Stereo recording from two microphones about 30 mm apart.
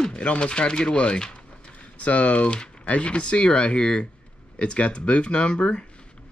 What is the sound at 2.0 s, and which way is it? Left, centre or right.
Speech, left.